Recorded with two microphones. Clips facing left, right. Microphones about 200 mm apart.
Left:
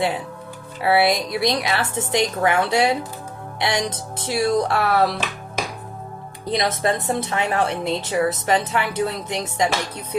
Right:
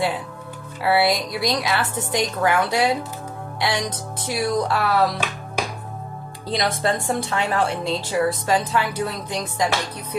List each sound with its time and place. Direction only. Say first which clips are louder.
0.8 s speech: left 1 dB; 25° left (ahead or behind)
6.5 s speech: left 1 dB; 25° left (ahead or behind)